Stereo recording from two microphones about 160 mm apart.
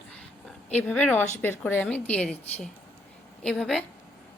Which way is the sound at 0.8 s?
10° left (ahead or behind).